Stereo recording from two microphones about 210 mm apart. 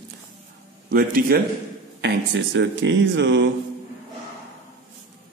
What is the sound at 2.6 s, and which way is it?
Speech, 60° right (ahead or behind).